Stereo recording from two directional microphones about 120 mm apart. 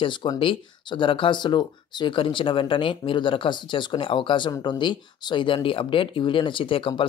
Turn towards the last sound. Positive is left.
turn(degrees=45)  # may be behind; listen again after turning